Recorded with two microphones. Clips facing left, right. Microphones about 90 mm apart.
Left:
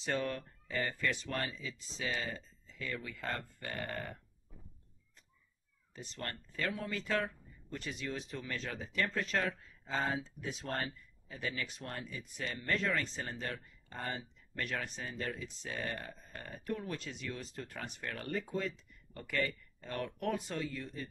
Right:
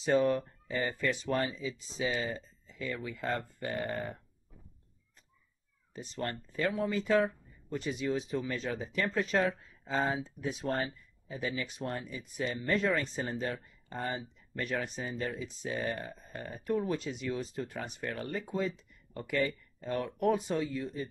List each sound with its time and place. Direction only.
0.0 s speech: 15° right (ahead or behind)
5.9 s speech: 15° right (ahead or behind)